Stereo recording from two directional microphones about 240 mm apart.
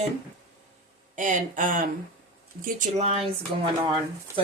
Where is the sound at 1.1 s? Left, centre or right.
Right.